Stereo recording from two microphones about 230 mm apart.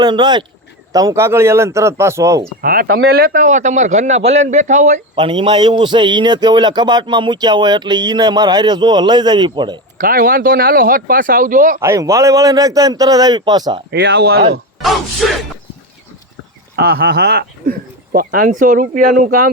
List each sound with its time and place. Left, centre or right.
0.0 s a man's voice: centre
2.6 s speech: right
5.1 s a man's voice: right
10.0 s speech: right
11.8 s a man's voice: centre
13.9 s speech: right
14.8 s speech: centre
16.7 s speech: right